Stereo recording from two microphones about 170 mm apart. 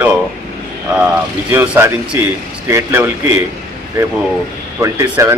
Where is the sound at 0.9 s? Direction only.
5° right (ahead or behind).